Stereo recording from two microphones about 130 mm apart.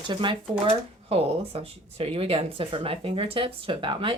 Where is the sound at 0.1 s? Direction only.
40° right (ahead or behind).